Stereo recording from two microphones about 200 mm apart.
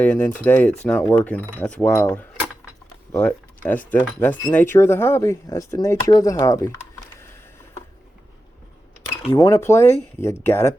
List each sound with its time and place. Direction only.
0.0 s speech: 5° left (ahead or behind)
9.3 s speech: 15° left (ahead or behind)